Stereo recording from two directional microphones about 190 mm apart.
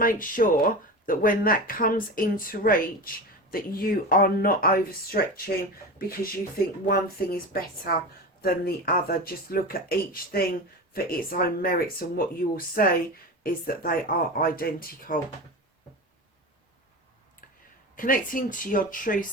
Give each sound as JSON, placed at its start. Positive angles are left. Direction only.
{"t": 0.0, "sound": "speech", "side_deg": 45}
{"t": 17.9, "sound": "speech", "side_deg": 45}